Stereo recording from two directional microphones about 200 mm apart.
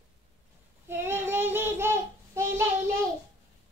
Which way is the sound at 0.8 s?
10° right (ahead or behind).